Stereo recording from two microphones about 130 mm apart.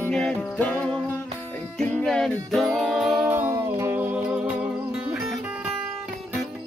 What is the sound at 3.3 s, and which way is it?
Music, 15° right (ahead or behind).